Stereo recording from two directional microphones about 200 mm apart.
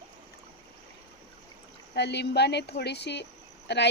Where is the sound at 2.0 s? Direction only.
55° left (ahead or behind).